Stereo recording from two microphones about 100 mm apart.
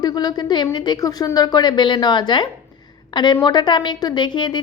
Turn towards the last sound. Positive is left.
turn(degrees=50)  # may be behind; listen again after turning